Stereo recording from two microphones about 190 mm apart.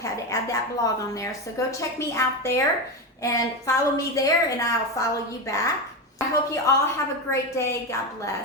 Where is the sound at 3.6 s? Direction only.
15° left (ahead or behind).